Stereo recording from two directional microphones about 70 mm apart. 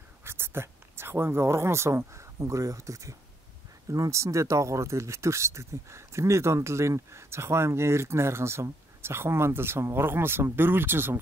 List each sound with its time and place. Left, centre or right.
0.2 s speech: right